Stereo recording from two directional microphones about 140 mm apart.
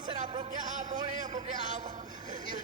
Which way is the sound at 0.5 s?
65° right (ahead or behind).